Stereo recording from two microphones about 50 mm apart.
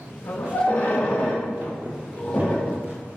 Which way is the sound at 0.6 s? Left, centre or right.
Left.